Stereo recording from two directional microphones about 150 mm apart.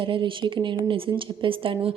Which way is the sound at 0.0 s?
35° right (ahead or behind).